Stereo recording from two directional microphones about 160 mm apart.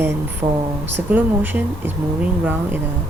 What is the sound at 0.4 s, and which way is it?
Speech, 25° right (ahead or behind).